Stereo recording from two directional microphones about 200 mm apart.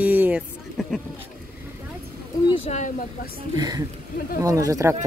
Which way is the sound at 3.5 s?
20° right (ahead or behind).